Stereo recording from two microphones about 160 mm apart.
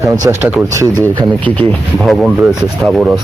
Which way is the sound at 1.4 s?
5° left (ahead or behind).